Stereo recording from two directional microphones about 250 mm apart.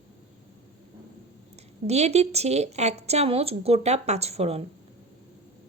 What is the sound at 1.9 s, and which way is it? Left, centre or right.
Speech, right.